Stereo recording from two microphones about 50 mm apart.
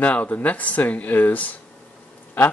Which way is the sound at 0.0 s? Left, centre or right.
Left.